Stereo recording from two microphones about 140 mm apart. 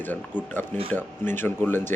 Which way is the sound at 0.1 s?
10° left (ahead or behind).